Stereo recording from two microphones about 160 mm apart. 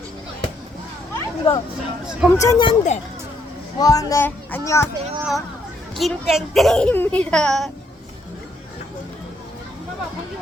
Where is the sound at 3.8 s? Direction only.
20° left (ahead or behind).